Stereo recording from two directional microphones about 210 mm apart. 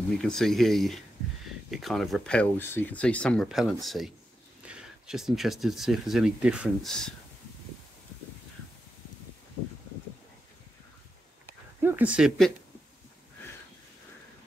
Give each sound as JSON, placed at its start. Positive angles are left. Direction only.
{"t": 0.1, "sound": "speech", "side_deg": 0}
{"t": 11.8, "sound": "speech", "side_deg": -10}